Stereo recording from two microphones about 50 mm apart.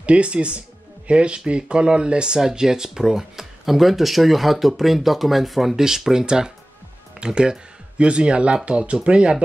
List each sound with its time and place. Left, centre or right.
0.0 s speech: right